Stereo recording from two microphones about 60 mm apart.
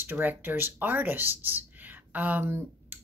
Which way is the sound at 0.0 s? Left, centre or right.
Right.